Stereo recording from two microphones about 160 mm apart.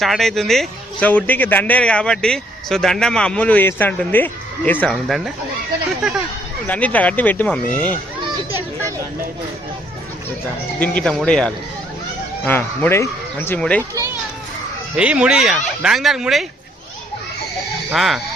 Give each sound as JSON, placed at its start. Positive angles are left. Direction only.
{"t": 0.0, "sound": "a man's voice", "side_deg": 0}
{"t": 6.7, "sound": "a man's voice", "side_deg": 10}
{"t": 10.8, "sound": "a man's voice", "side_deg": 5}
{"t": 13.9, "sound": "a child's voice", "side_deg": -20}
{"t": 14.9, "sound": "speech", "side_deg": -5}
{"t": 17.9, "sound": "speech", "side_deg": 0}